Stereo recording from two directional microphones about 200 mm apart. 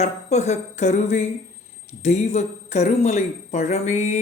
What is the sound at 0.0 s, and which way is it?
A man's voice, 35° left (ahead or behind).